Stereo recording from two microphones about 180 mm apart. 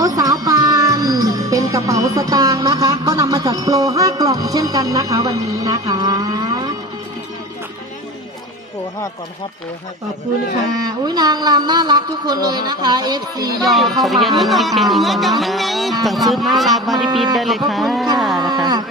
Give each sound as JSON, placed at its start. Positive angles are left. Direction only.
{"t": 0.0, "sound": "speech", "side_deg": -20}
{"t": 10.8, "sound": "speech", "side_deg": -25}
{"t": 13.7, "sound": "speech", "side_deg": 0}
{"t": 18.2, "sound": "a sound", "side_deg": 0}
{"t": 18.6, "sound": "speech", "side_deg": -25}